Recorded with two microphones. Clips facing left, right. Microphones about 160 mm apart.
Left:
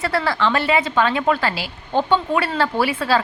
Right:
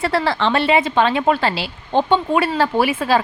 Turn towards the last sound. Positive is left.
turn(degrees=-20)  # may be behind; listen again after turning